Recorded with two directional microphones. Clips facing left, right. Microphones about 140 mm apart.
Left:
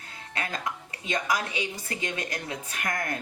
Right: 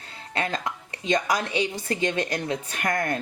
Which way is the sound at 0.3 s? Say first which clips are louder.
Right 5 dB; 30° right (ahead or behind).